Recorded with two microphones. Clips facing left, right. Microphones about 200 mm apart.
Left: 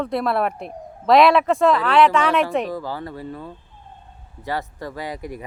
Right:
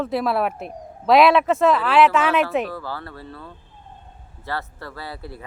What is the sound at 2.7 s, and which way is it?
Speech, 15° left (ahead or behind).